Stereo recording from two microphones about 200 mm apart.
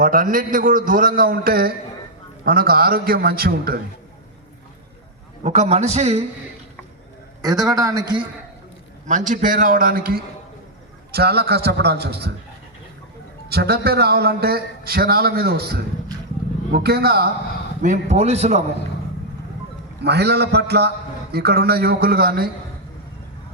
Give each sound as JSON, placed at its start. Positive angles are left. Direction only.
{"t": 0.0, "sound": "a man's voice", "side_deg": -45}
{"t": 5.4, "sound": "a man's voice", "side_deg": -35}
{"t": 7.4, "sound": "a man's voice", "side_deg": -15}
{"t": 9.0, "sound": "a man's voice", "side_deg": -40}
{"t": 13.5, "sound": "a man's voice", "side_deg": -55}
{"t": 17.8, "sound": "a man's voice", "side_deg": -35}
{"t": 20.1, "sound": "a man's voice", "side_deg": -55}